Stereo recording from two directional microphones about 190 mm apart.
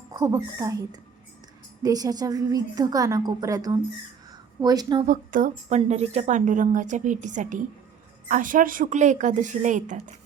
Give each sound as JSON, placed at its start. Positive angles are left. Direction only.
{"t": 0.1, "sound": "a woman's voice", "side_deg": -15}
{"t": 1.8, "sound": "a woman's voice", "side_deg": -20}
{"t": 4.3, "sound": "a sound", "side_deg": -20}
{"t": 5.0, "sound": "a woman's voice", "side_deg": -45}